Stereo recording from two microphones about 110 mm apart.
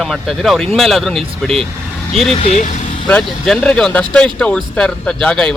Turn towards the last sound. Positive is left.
turn(degrees=5)  # may be behind; listen again after turning